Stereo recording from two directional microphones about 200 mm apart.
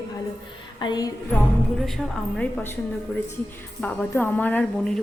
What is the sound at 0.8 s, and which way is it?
Music, 20° left (ahead or behind).